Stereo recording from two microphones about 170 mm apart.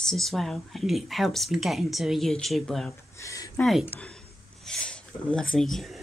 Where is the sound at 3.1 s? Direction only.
20° left (ahead or behind).